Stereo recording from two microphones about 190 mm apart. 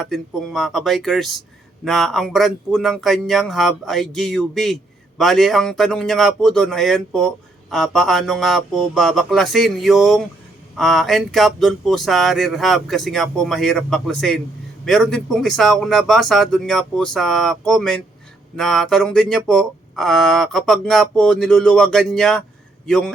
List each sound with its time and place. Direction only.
0.0 s speech: centre (ahead or behind)